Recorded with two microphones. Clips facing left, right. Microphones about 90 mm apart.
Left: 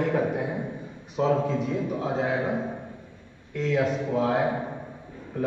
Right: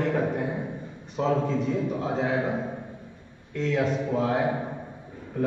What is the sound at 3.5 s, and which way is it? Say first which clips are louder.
Speech: left 1 dB; centre (ahead or behind).